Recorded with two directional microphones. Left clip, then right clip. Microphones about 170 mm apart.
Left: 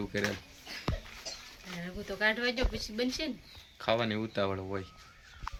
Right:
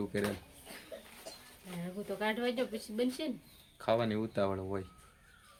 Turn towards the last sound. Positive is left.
turn(degrees=5)  # may be behind; listen again after turning